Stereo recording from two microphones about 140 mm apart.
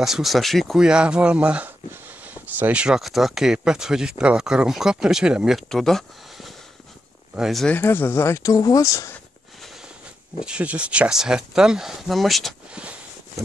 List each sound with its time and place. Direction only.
0.0 s speech: centre (ahead or behind)
7.6 s speech: 15° left (ahead or behind)
10.4 s speech: 10° right (ahead or behind)